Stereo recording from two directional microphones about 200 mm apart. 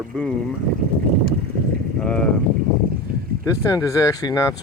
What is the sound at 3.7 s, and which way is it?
Speech, 15° left (ahead or behind).